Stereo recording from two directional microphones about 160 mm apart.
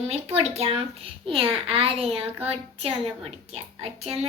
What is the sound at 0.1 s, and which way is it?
Child singing, 40° right (ahead or behind).